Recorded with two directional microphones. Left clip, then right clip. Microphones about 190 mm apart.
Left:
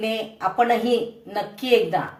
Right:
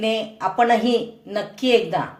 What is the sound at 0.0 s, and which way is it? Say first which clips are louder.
Speech: right 2 dB; 30° right (ahead or behind).